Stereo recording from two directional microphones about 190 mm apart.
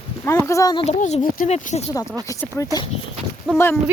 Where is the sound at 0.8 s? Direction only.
35° left (ahead or behind).